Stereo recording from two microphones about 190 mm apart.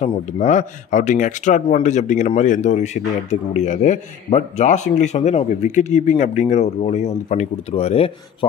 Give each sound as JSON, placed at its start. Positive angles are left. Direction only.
{"t": 0.0, "sound": "speech", "side_deg": 40}